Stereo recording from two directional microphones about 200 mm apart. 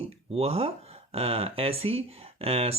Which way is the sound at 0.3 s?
30° right (ahead or behind).